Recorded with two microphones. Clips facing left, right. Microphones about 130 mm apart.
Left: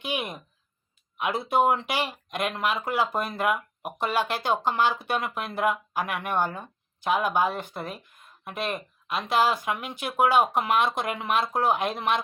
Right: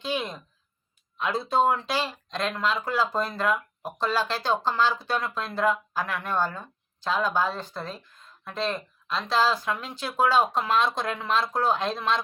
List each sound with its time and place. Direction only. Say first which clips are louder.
0.0 s speech: right 1 dB; 20° left (ahead or behind)